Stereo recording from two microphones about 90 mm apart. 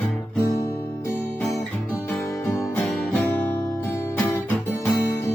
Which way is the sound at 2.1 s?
30° left (ahead or behind).